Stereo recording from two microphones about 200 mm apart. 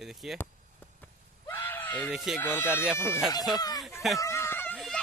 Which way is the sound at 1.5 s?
10° left (ahead or behind).